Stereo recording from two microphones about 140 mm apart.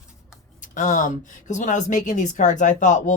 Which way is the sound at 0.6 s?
65° left (ahead or behind).